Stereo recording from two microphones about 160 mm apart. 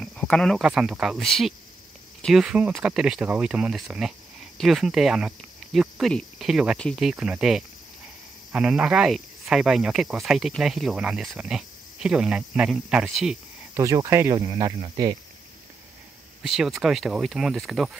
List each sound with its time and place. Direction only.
0.0 s speech: 5° left (ahead or behind)
13.7 s speech: 20° right (ahead or behind)
16.4 s speech: centre (ahead or behind)